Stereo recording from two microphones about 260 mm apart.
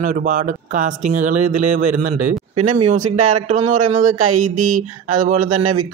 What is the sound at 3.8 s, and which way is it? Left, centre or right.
Speech, right.